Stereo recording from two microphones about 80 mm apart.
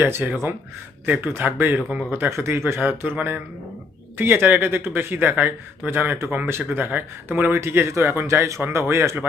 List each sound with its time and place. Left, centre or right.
0.0 s speech: right
1.0 s speech: centre
1.3 s speech: right